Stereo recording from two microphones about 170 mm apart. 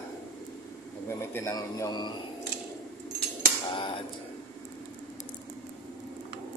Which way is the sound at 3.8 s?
30° left (ahead or behind).